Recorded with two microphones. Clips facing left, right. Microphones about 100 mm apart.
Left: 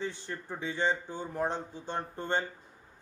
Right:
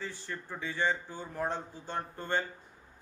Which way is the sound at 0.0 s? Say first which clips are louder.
Left 3 dB; 20° left (ahead or behind).